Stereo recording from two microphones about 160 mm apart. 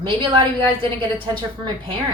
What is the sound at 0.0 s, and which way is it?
Speech, 30° right (ahead or behind).